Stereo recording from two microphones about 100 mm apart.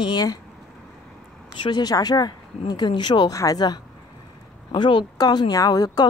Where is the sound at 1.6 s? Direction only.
50° left (ahead or behind).